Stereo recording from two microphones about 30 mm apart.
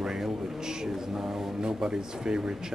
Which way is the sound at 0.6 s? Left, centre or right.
Right.